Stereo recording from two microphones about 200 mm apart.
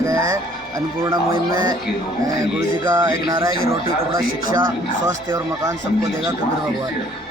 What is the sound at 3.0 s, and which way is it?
Speech, 15° right (ahead or behind).